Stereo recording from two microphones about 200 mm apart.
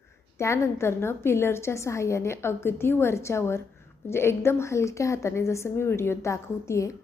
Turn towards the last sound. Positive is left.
turn(degrees=15)  # may be behind; listen again after turning